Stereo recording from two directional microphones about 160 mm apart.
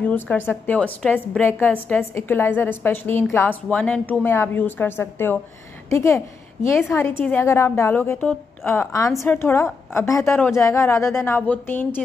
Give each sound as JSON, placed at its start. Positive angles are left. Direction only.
{"t": 0.0, "sound": "a woman's voice", "side_deg": 10}